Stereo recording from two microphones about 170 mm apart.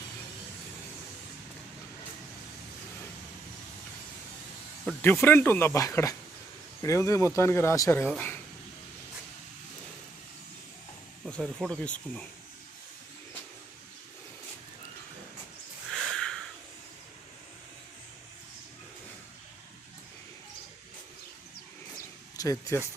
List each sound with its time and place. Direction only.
5.0 s speech: 15° left (ahead or behind)
8.0 s speech: 5° left (ahead or behind)
11.3 s speech: centre (ahead or behind)
15.9 s a sound: 5° left (ahead or behind)
22.4 s speech: 20° left (ahead or behind)